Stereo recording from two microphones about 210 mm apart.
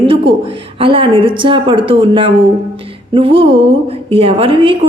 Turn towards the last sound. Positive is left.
turn(degrees=-25)  # may be behind; listen again after turning